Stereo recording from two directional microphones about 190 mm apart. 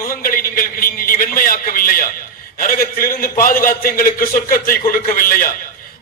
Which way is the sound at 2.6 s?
50° left (ahead or behind).